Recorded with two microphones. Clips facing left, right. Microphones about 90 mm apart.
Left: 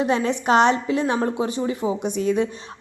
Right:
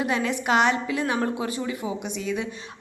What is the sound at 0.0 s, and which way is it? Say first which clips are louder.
A woman's voice: left 4 dB; 30° left (ahead or behind).